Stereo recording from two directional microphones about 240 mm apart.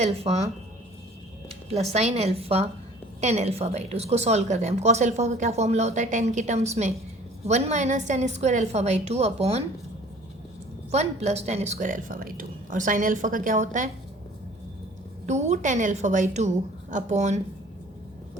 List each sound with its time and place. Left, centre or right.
0.0 s a woman's voice: right
1.7 s a woman's voice: right
10.9 s speech: right
15.3 s a woman's voice: right